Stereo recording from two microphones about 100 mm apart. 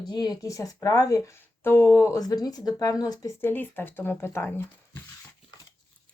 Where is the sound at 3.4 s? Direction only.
20° left (ahead or behind).